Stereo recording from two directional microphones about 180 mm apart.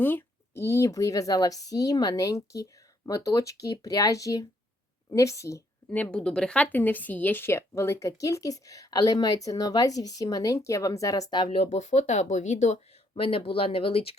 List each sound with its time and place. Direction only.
0.0 s a woman's voice: 10° left (ahead or behind)
11.5 s speech: 35° left (ahead or behind)